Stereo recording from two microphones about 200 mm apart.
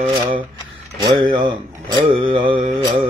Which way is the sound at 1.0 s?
20° right (ahead or behind).